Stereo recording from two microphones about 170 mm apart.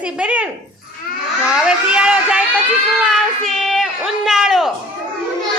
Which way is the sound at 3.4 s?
Centre (ahead or behind).